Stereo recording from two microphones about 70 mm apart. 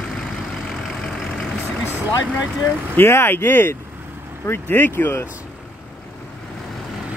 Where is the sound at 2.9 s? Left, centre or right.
Left.